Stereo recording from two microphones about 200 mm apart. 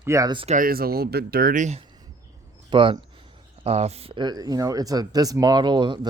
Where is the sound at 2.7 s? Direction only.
25° right (ahead or behind).